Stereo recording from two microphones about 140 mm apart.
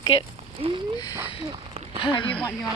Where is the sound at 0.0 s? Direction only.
30° left (ahead or behind).